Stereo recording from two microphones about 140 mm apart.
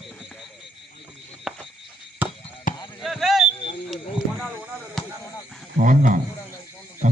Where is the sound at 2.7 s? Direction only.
70° left (ahead or behind).